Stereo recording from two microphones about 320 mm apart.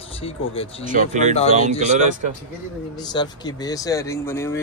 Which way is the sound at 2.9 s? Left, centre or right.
Centre.